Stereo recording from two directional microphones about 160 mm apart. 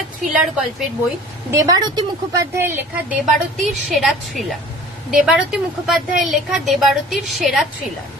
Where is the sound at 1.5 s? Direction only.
25° right (ahead or behind).